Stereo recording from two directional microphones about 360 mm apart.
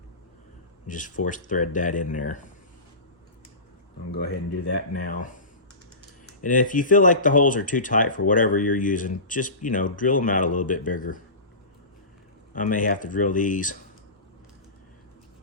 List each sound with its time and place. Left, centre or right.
0.9 s speech: left
4.2 s speech: left
6.4 s speech: left
12.5 s speech: left